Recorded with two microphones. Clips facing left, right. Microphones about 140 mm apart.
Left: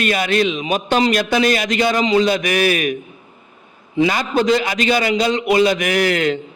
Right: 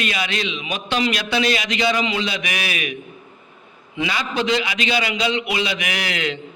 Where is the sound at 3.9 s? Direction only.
45° left (ahead or behind).